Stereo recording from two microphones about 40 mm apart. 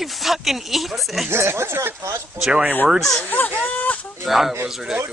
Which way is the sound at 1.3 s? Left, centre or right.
Right.